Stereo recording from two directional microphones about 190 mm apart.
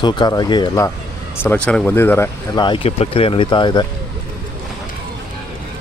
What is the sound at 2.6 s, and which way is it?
Speech, 30° left (ahead or behind).